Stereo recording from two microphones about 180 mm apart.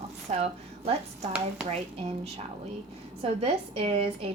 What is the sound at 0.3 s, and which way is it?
Speech, 35° right (ahead or behind).